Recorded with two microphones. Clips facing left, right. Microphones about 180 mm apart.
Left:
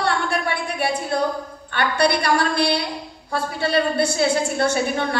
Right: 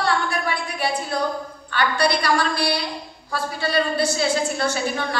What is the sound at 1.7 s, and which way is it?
Speech, 55° left (ahead or behind).